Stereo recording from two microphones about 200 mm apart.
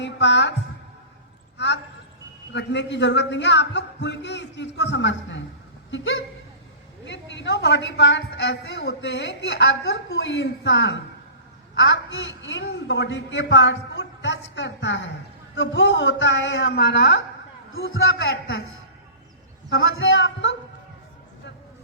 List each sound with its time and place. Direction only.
0.0 s a woman's voice: 60° left (ahead or behind)
1.5 s a woman's voice: 60° left (ahead or behind)
17.7 s a man's voice: 80° left; by 18.6 s 55° left (ahead or behind)
19.7 s speech: 75° left (ahead or behind)